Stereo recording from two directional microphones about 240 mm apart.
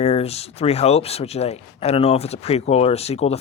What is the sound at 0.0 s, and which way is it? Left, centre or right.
Speech, left.